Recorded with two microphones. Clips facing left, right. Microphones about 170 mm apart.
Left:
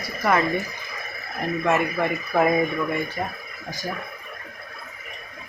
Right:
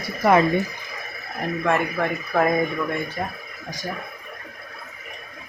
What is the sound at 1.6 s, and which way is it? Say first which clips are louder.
Speech: even; 5° left (ahead or behind).